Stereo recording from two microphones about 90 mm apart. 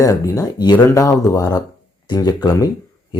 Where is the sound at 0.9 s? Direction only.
40° left (ahead or behind).